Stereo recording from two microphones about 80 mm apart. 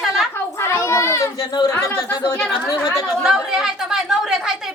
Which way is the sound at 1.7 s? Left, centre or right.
Left.